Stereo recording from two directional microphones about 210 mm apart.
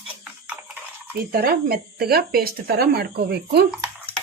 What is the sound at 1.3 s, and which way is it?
Speech, 45° right (ahead or behind).